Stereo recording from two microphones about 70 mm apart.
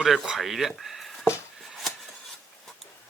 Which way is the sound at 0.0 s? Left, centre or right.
Centre.